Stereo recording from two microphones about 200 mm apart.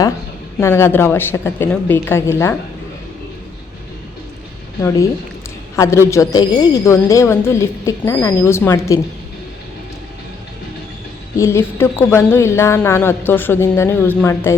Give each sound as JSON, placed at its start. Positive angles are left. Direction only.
{"t": 0.6, "sound": "a woman's voice", "side_deg": 10}
{"t": 4.8, "sound": "a woman's voice", "side_deg": 15}
{"t": 11.3, "sound": "a woman's voice", "side_deg": 15}